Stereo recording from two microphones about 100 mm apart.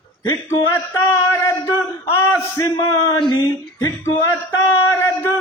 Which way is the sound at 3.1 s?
50° left (ahead or behind).